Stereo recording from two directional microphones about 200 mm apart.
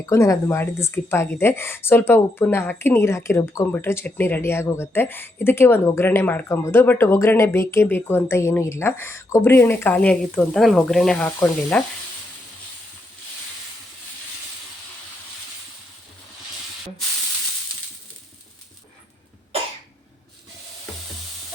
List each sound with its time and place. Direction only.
0.0 s speech: 15° left (ahead or behind)